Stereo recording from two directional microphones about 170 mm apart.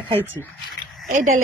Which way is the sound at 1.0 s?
50° right (ahead or behind).